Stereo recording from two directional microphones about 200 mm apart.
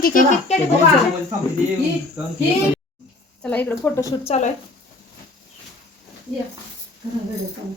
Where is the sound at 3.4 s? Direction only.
10° left (ahead or behind).